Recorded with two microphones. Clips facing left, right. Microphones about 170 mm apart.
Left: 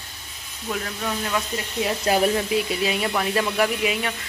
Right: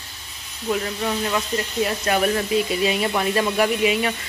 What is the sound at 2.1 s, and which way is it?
Speech, 30° left (ahead or behind).